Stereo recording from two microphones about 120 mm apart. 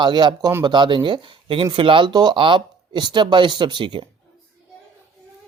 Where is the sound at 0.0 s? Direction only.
40° right (ahead or behind).